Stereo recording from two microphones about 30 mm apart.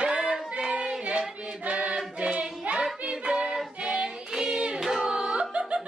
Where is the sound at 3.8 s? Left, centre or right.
Right.